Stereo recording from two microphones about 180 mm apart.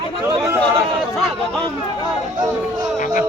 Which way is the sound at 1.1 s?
Centre (ahead or behind).